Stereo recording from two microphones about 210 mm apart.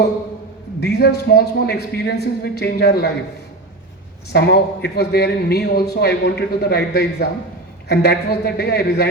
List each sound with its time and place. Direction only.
0.8 s a man's voice: 50° left (ahead or behind)
4.3 s a man's voice: 50° left (ahead or behind)